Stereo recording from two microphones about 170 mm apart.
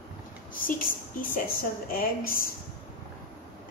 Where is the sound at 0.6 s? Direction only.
55° left (ahead or behind).